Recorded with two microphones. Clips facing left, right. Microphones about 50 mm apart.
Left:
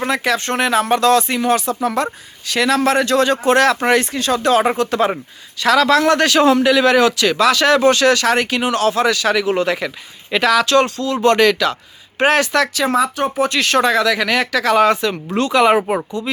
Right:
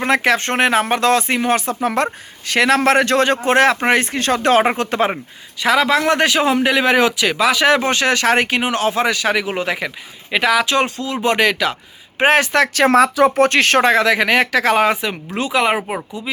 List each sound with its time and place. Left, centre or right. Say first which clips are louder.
0.1 s speech: right 5 dB; right
5.6 s speech: left 2 dB; centre
6.6 s speech: left 2 dB; right
12.9 s speech: right 5 dB; right
13.5 s speech: right 2 dB; right
14.8 s speech: left 2 dB; centre